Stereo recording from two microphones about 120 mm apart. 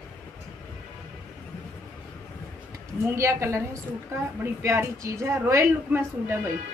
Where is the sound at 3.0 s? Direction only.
25° right (ahead or behind).